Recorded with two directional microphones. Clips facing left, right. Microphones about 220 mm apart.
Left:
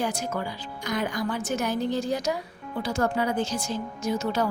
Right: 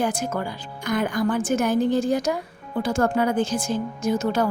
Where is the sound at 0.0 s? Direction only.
50° right (ahead or behind).